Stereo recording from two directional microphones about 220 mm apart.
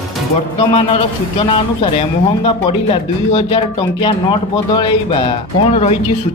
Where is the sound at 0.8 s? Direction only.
25° left (ahead or behind).